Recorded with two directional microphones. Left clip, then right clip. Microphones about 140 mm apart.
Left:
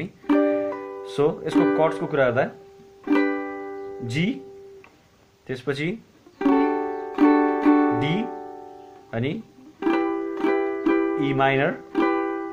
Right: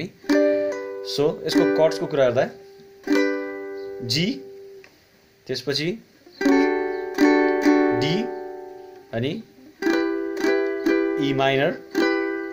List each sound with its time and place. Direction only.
0.0 s music: 35° right (ahead or behind)
1.1 s speech: 30° right (ahead or behind)
1.9 s speech: 25° right (ahead or behind)
3.1 s music: 50° right (ahead or behind)
4.0 s speech: 35° right (ahead or behind)
5.5 s speech: 25° right (ahead or behind)
5.9 s music: 30° right (ahead or behind)
6.6 s music: 45° right (ahead or behind)
11.1 s speech: 35° right (ahead or behind)
12.2 s music: 45° right (ahead or behind)